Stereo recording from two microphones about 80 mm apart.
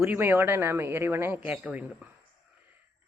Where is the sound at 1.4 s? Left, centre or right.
Centre.